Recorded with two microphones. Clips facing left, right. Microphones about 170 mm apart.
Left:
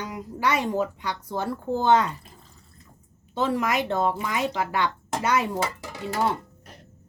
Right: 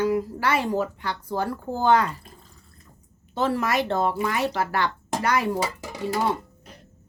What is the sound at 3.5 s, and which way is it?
A woman's voice, 15° left (ahead or behind).